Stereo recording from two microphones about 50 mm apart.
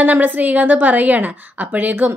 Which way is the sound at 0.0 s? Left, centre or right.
Right.